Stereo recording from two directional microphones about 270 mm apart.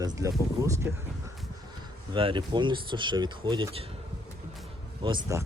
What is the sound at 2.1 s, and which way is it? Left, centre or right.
Speech, centre.